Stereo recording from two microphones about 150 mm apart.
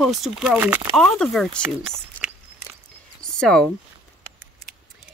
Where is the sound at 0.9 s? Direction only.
5° left (ahead or behind).